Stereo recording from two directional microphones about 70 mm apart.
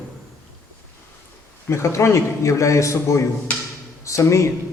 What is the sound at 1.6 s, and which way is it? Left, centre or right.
A man's voice, left.